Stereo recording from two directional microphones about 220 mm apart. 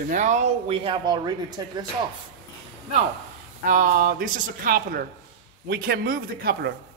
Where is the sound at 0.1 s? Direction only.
35° right (ahead or behind); by 1.7 s 15° right (ahead or behind).